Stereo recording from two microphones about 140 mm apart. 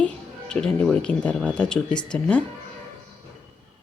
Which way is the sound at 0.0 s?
5° left (ahead or behind).